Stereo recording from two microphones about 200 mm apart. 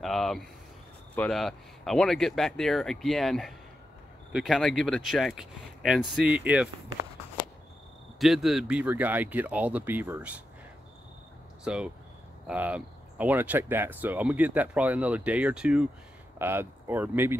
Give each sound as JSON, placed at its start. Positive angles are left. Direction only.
{"t": 0.0, "sound": "speech", "side_deg": 0}
{"t": 8.2, "sound": "speech", "side_deg": 0}
{"t": 11.6, "sound": "speech", "side_deg": -5}